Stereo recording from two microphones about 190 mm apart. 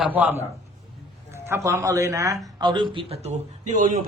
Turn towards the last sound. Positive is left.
turn(degrees=-45)  # may be behind; listen again after turning